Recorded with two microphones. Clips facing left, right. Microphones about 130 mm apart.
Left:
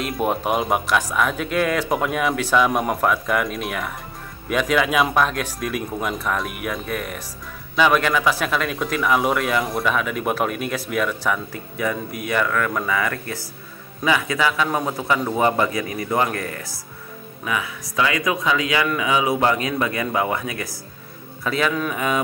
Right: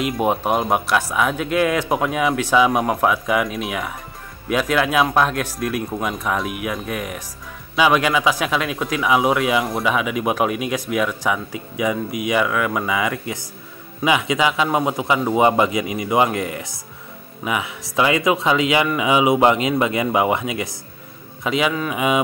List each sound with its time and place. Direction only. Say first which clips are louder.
0.0 s speech: right 3 dB; 5° right (ahead or behind)